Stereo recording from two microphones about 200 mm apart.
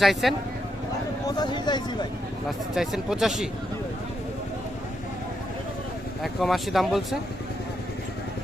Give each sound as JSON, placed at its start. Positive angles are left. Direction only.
{"t": 0.0, "sound": "speech", "side_deg": 0}
{"t": 1.4, "sound": "speech", "side_deg": 20}
{"t": 2.7, "sound": "speech", "side_deg": 0}
{"t": 6.2, "sound": "speech", "side_deg": 0}